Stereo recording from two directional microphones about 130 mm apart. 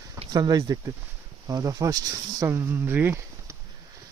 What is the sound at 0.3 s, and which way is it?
Speech, 30° right (ahead or behind).